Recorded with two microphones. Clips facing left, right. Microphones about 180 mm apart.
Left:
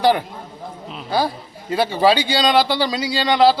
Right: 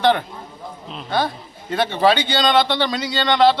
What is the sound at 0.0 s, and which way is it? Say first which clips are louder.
Speech: left 1 dB; 10° left (ahead or behind).